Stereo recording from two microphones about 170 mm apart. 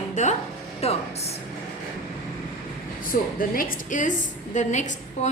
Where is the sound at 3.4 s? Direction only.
55° left (ahead or behind).